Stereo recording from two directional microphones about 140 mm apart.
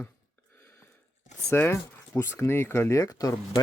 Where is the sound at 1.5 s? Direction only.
20° left (ahead or behind).